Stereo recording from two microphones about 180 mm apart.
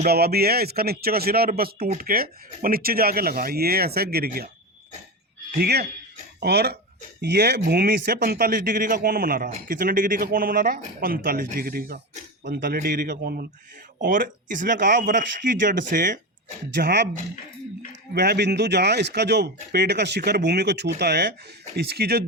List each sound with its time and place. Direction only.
0.0 s a man's voice: 60° right (ahead or behind)
5.5 s a man's voice: 65° right (ahead or behind)
16.7 s speech: 70° right (ahead or behind)
18.1 s a man's voice: 65° right (ahead or behind)